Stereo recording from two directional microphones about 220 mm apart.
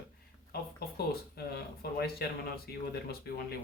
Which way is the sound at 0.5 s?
45° left (ahead or behind).